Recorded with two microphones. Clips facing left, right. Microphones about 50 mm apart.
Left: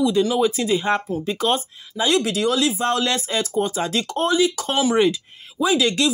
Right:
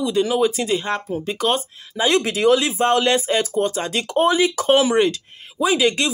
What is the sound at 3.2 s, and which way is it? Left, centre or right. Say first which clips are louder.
Speech: right 3 dB; centre.